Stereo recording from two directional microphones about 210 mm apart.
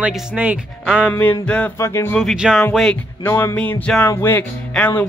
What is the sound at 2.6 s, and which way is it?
Music, 5° left (ahead or behind).